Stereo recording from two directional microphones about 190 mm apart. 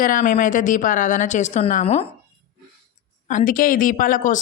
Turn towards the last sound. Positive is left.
turn(degrees=45)  # may be behind; listen again after turning